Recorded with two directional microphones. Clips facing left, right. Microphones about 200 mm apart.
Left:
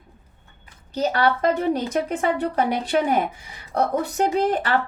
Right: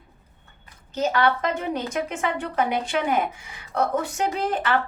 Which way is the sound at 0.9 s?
35° left (ahead or behind).